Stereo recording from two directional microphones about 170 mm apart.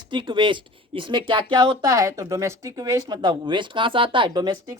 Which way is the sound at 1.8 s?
15° right (ahead or behind).